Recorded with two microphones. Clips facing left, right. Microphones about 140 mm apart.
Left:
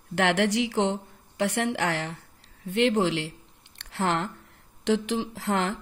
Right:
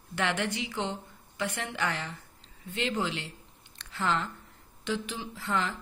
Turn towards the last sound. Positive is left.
turn(degrees=80)